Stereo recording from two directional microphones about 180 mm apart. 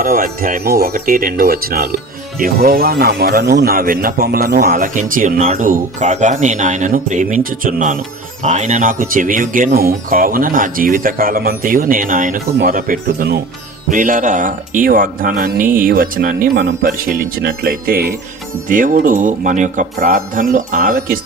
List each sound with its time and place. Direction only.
0.0 s speech: 50° right (ahead or behind)
13.9 s speech: 45° right (ahead or behind)